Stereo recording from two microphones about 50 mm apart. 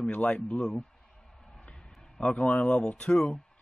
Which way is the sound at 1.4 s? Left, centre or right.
Left.